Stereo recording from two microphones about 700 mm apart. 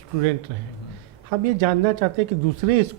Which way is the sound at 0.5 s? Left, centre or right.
Right.